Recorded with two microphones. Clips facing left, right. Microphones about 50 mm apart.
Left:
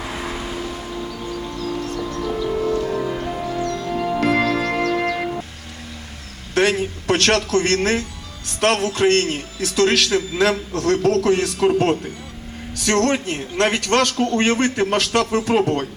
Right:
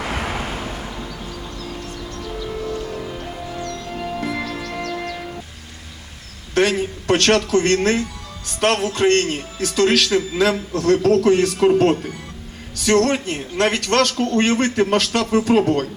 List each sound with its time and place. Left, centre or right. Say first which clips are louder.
0.0 s music: right 2 dB; right
4.2 s music: left 7 dB; left
4.9 s music: left 6 dB; left
6.5 s a man's voice: even; centre